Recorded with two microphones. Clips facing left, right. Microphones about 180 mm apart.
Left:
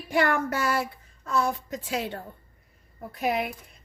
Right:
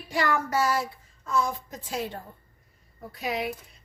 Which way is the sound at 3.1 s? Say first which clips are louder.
Left 4 dB; 55° left (ahead or behind).